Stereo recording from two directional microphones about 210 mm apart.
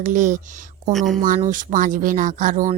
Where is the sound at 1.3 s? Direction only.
35° right (ahead or behind).